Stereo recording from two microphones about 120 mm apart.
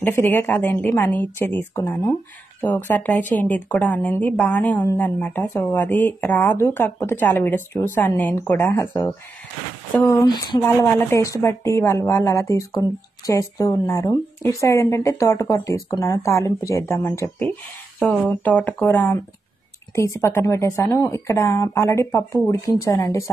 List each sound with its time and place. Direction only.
0.0 s speech: 20° left (ahead or behind)
10.2 s speech: 35° left (ahead or behind)
10.6 s a woman's voice: 20° left (ahead or behind)
18.3 s speech: 10° left (ahead or behind)
20.0 s a woman's voice: 25° left (ahead or behind)